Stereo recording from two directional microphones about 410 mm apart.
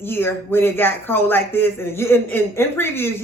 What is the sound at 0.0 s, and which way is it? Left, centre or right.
A woman's voice, centre.